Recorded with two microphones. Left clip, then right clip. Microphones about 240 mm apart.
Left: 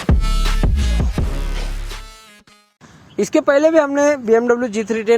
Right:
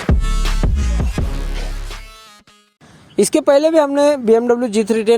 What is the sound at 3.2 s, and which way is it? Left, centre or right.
A woman's voice, right.